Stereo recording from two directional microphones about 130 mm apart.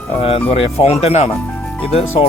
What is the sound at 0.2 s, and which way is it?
Speech, 45° left (ahead or behind).